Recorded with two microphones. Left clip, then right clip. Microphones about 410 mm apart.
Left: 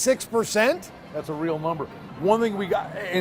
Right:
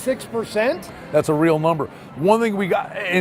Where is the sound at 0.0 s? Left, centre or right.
Left.